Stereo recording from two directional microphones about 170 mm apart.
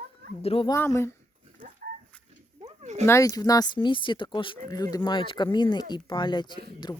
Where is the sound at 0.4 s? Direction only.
35° left (ahead or behind).